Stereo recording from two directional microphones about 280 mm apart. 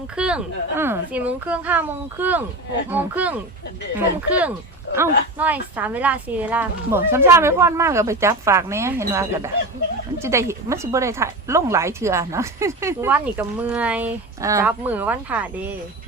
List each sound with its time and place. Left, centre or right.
0.2 s speech: centre
4.9 s a sound: left
5.4 s speech: centre